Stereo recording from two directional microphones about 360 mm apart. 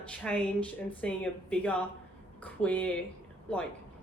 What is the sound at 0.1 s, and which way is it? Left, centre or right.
Speech, centre.